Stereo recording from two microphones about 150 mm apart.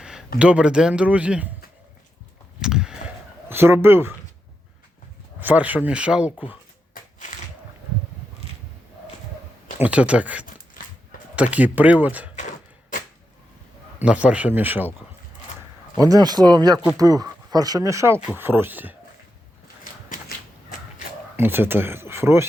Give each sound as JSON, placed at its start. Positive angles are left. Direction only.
{"t": 0.0, "sound": "a sound", "side_deg": -5}
{"t": 0.3, "sound": "speech", "side_deg": -5}
{"t": 2.6, "sound": "a sound", "side_deg": -5}
{"t": 3.5, "sound": "speech", "side_deg": -15}
{"t": 5.4, "sound": "speech", "side_deg": -10}
{"t": 6.9, "sound": "a sound", "side_deg": 55}
{"t": 9.8, "sound": "speech", "side_deg": -10}
{"t": 11.5, "sound": "speech", "side_deg": -10}
{"t": 14.0, "sound": "speech", "side_deg": -10}
{"t": 16.0, "sound": "speech", "side_deg": -25}
{"t": 19.8, "sound": "a sound", "side_deg": 70}
{"t": 21.3, "sound": "speech", "side_deg": -15}